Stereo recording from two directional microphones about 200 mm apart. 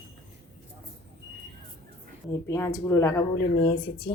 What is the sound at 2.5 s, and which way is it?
Speech, 15° left (ahead or behind).